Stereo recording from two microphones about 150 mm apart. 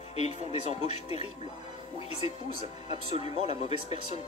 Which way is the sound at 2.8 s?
45° left (ahead or behind).